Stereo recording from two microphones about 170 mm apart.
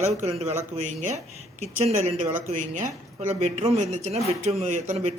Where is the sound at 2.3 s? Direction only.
50° right (ahead or behind).